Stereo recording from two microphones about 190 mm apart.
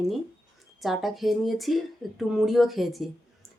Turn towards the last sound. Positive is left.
turn(degrees=0)  # may be behind; listen again after turning